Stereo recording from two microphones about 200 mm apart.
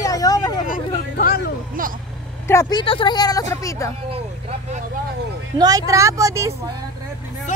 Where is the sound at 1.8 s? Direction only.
45° right (ahead or behind).